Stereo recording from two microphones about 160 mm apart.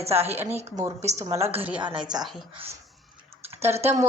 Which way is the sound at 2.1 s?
5° right (ahead or behind).